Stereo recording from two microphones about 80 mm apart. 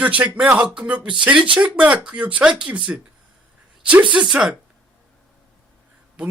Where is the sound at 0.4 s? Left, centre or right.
Centre.